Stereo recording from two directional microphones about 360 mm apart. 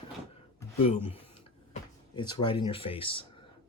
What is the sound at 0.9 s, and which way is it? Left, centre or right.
Speech, centre.